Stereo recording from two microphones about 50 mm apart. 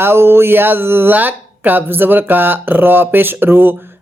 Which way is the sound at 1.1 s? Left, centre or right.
Right.